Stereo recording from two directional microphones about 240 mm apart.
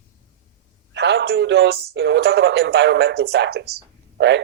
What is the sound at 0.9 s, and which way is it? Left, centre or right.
A man's voice, right.